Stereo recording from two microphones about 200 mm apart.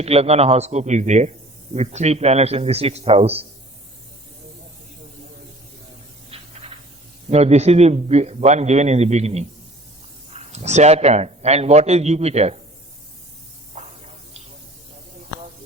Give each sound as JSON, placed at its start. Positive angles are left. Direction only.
{"t": 0.0, "sound": "a man's voice", "side_deg": -30}
{"t": 6.3, "sound": "spray", "side_deg": -30}
{"t": 7.3, "sound": "a man's voice", "side_deg": -30}
{"t": 13.7, "sound": "spray", "side_deg": -35}